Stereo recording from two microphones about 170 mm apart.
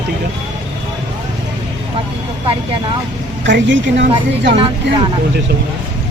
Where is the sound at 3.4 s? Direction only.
90° right.